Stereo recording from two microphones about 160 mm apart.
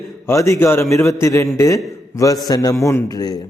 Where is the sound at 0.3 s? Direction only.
20° left (ahead or behind).